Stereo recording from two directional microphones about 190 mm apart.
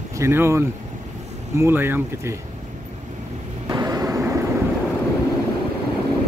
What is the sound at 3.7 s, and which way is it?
Vehicle, 20° right (ahead or behind).